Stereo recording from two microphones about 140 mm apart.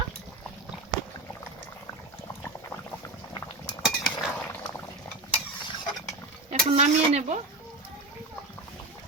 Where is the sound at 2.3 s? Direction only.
20° left (ahead or behind).